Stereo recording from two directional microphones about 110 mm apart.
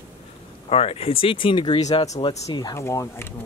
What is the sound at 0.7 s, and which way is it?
Speech, 65° left (ahead or behind).